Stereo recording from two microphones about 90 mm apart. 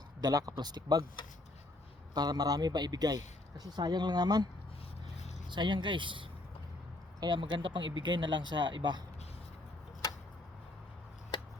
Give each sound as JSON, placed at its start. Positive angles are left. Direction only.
{"t": 0.2, "sound": "a man's voice", "side_deg": -45}
{"t": 2.1, "sound": "a man's voice", "side_deg": -45}
{"t": 5.5, "sound": "speech", "side_deg": -60}
{"t": 11.3, "sound": "a sound", "side_deg": 70}